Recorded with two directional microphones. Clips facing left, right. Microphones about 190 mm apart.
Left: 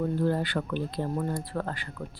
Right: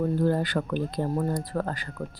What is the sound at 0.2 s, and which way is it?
Speech, 45° right (ahead or behind).